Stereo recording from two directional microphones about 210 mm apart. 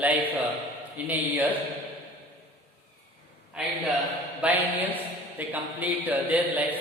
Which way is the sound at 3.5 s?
5° right (ahead or behind).